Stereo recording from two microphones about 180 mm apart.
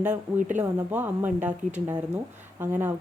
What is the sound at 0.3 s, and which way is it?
Speech, 45° right (ahead or behind).